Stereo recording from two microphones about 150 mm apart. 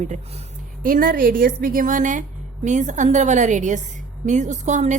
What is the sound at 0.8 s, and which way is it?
A woman's voice, 65° right (ahead or behind).